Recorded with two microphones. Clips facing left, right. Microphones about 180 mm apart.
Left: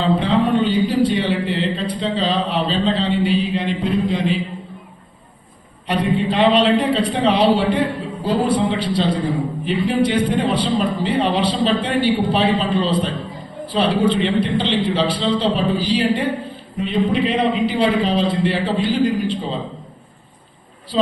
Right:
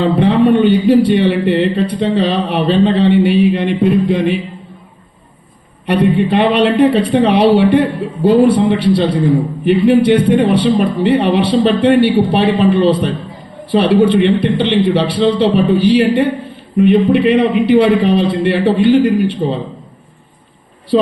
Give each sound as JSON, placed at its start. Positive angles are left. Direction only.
{"t": 0.0, "sound": "a man's voice", "side_deg": -65}
{"t": 5.8, "sound": "a man's voice", "side_deg": -65}
{"t": 20.9, "sound": "a man's voice", "side_deg": -60}